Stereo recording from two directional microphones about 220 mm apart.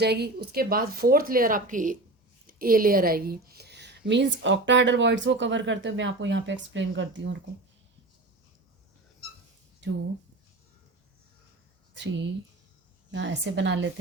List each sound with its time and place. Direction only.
0.0 s a woman's voice: 45° right (ahead or behind)
11.9 s a woman's voice: 55° right (ahead or behind)